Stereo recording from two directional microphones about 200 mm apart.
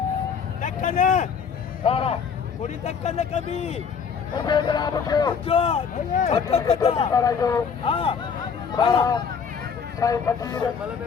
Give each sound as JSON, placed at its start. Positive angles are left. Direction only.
{"t": 0.6, "sound": "vehicle", "side_deg": 40}
{"t": 1.8, "sound": "a man's voice", "side_deg": 30}
{"t": 4.4, "sound": "speech", "side_deg": 20}
{"t": 7.1, "sound": "speech", "side_deg": 15}